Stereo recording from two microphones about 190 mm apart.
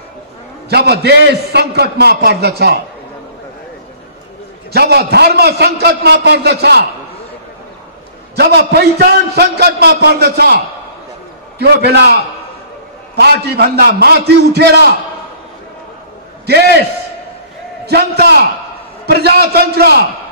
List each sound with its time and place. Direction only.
0.7 s a man's voice: 60° right (ahead or behind)
4.7 s a man's voice: 60° right (ahead or behind)
8.4 s a man's voice: 60° right (ahead or behind)
16.4 s a man's voice: 60° right (ahead or behind)
17.8 s a man's voice: 60° right (ahead or behind)